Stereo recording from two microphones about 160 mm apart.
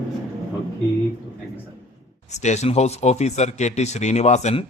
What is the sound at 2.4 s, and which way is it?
Speech, 45° left (ahead or behind).